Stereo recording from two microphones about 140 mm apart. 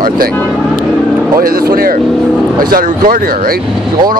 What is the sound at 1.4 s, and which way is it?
Speech, 90° right.